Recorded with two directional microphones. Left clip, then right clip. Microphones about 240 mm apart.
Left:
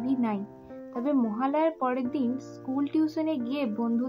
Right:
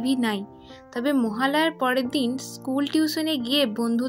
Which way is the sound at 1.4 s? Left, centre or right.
Right.